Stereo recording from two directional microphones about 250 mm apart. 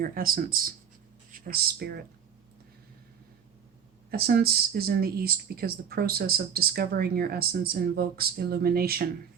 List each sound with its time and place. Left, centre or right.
0.0 s speech: right
4.1 s speech: right